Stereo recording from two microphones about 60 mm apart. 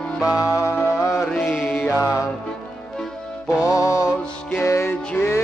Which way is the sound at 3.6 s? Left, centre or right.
Left.